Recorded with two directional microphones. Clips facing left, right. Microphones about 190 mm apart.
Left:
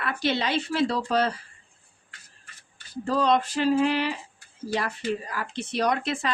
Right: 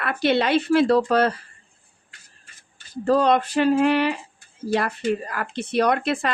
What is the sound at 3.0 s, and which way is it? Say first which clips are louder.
Speech: right 5 dB; 60° right (ahead or behind).